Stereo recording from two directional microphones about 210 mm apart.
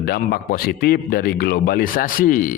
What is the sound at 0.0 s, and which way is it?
A man's voice, 50° left (ahead or behind).